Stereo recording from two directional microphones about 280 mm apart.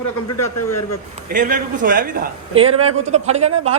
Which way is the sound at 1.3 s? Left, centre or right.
Right.